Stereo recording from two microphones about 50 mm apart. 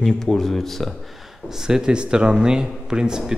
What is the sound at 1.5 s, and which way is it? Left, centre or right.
A man's voice, centre.